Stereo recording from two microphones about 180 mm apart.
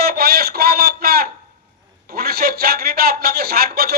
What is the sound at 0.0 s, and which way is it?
Radio, 60° right (ahead or behind).